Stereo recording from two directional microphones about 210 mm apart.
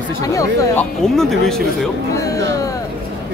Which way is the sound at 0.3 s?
15° left (ahead or behind).